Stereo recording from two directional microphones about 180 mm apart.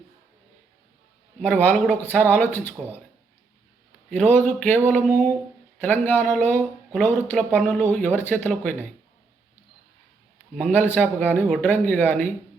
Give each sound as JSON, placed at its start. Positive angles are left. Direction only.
{"t": 1.4, "sound": "speech", "side_deg": 10}
{"t": 4.1, "sound": "speech", "side_deg": 10}
{"t": 4.9, "sound": "a sound", "side_deg": -50}
{"t": 5.8, "sound": "speech", "side_deg": 10}
{"t": 10.6, "sound": "speech", "side_deg": 10}